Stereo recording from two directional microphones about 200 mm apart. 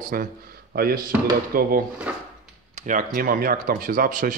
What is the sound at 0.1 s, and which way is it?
Speech, 45° right (ahead or behind).